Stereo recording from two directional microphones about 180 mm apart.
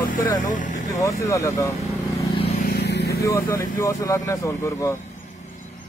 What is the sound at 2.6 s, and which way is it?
Vehicle, 65° left (ahead or behind).